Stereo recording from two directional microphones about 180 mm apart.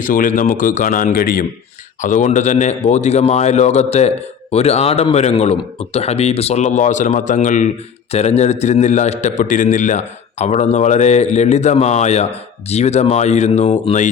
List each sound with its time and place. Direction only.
0.0 s speech: 50° left (ahead or behind)